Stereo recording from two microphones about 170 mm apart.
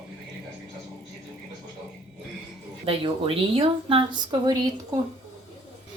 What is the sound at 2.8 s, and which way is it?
Speech, 30° right (ahead or behind).